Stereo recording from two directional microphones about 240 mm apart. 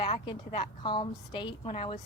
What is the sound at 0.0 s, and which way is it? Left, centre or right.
Speech, left.